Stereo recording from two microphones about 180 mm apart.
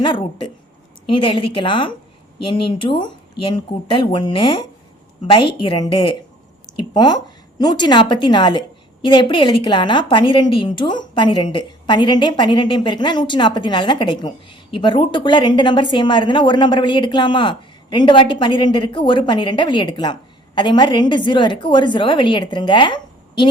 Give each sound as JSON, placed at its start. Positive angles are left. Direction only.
{"t": 0.0, "sound": "a woman's voice", "side_deg": 30}